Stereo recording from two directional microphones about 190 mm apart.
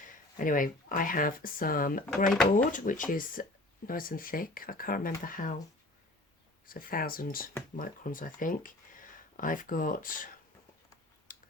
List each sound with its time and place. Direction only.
0.0 s speech: 45° left (ahead or behind)
2.3 s speech: 5° left (ahead or behind)
2.7 s speech: 45° left (ahead or behind)
6.7 s speech: 50° left (ahead or behind)
11.3 s a sound: 45° left (ahead or behind)